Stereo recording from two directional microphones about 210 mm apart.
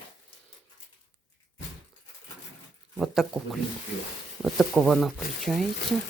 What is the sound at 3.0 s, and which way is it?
Speech, centre (ahead or behind).